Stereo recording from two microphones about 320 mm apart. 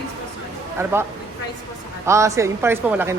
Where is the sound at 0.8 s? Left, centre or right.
Centre.